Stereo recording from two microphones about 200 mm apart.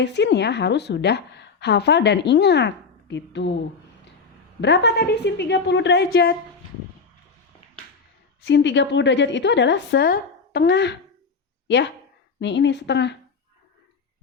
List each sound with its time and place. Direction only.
0.0 s a woman's voice: 60° left (ahead or behind)
4.6 s a woman's voice: 60° left (ahead or behind)
8.4 s a woman's voice: 60° left (ahead or behind)
12.4 s a woman's voice: 60° left (ahead or behind)